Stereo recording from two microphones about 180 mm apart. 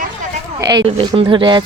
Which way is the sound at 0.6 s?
25° right (ahead or behind).